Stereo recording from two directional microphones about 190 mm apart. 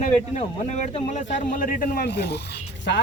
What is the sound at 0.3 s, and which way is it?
Speech, 40° left (ahead or behind).